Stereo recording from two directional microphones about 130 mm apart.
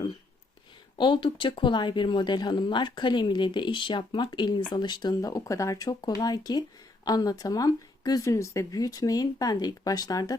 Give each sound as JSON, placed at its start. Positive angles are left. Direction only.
{"t": 0.9, "sound": "speech", "side_deg": 40}